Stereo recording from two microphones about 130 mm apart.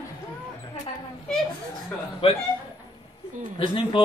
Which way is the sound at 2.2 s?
45° left (ahead or behind).